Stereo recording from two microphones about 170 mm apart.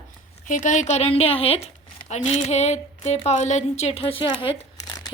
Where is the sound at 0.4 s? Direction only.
50° left (ahead or behind).